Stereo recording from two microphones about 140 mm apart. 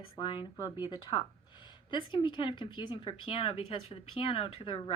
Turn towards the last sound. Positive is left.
turn(degrees=40)  # may be behind; listen again after turning